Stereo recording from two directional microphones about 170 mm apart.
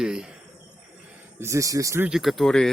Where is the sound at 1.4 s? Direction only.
20° right (ahead or behind).